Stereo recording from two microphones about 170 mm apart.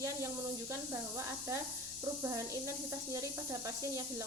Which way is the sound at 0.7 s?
15° right (ahead or behind).